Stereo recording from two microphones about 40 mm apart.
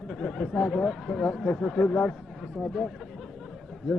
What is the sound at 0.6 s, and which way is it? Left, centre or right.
Speech, centre.